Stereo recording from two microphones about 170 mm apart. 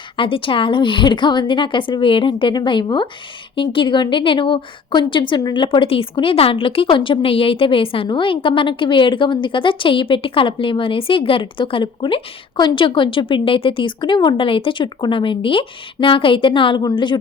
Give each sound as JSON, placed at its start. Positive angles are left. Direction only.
{"t": 0.2, "sound": "a woman's voice", "side_deg": 30}